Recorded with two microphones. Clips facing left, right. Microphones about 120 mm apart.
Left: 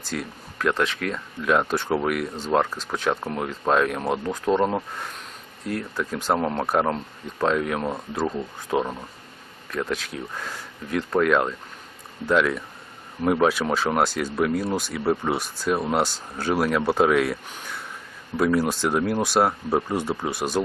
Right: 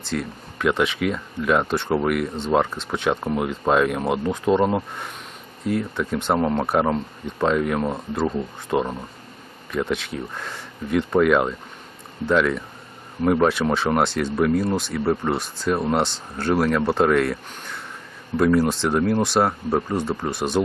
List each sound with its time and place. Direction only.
0.1 s speech: centre (ahead or behind)